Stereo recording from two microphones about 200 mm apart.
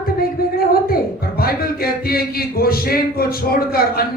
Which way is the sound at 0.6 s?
50° left (ahead or behind).